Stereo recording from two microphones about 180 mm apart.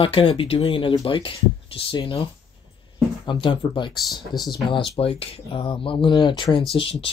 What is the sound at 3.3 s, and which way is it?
Speech, 25° left (ahead or behind).